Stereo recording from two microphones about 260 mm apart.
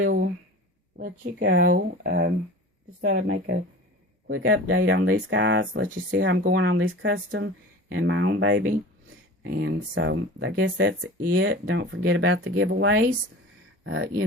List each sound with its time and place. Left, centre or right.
0.9 s speech: right